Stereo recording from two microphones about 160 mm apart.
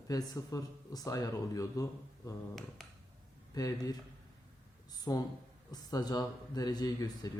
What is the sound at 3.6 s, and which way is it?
Speech, 25° left (ahead or behind).